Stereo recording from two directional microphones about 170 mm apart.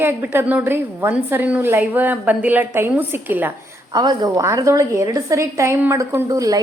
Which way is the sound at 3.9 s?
25° right (ahead or behind).